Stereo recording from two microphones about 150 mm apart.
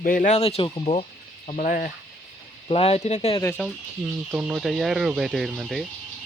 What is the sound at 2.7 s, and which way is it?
Speech, 40° left (ahead or behind).